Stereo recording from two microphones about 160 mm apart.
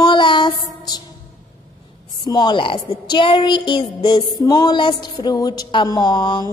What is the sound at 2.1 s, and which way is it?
A woman's voice, 30° left (ahead or behind).